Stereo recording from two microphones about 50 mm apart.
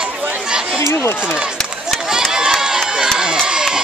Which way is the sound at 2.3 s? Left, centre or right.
Centre.